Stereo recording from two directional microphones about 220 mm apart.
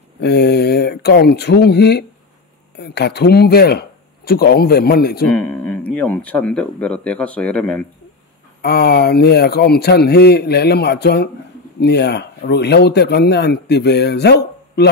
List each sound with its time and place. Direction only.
0.2 s speech: 50° left (ahead or behind)
5.3 s speech: 5° left (ahead or behind)
8.6 s speech: 45° left (ahead or behind)